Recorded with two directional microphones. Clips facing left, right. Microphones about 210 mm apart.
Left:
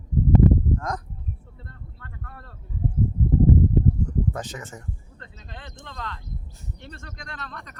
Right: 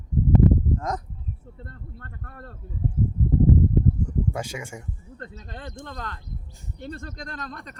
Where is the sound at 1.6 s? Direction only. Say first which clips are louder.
Right 3 dB; 45° right (ahead or behind).